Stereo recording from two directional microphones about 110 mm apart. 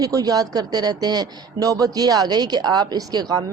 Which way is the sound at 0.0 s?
35° right (ahead or behind).